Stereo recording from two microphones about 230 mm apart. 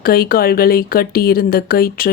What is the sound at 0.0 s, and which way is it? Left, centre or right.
Speech, left.